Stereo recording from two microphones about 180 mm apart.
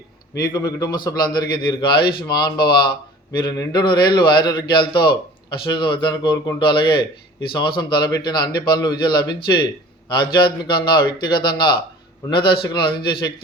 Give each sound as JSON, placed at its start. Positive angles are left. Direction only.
{"t": 0.4, "sound": "a man's voice", "side_deg": 20}